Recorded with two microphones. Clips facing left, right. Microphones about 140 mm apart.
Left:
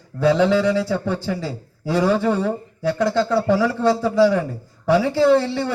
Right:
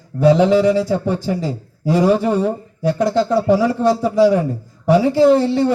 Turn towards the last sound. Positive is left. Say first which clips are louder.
# right 4 dB
turn(degrees=-20)  # may be behind; listen again after turning